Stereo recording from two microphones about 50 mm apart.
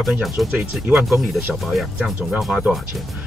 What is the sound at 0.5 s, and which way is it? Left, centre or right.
Speech, right.